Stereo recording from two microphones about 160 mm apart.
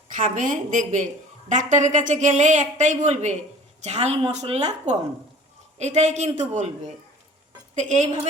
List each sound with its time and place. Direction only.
0.2 s a woman's voice: 55° right (ahead or behind)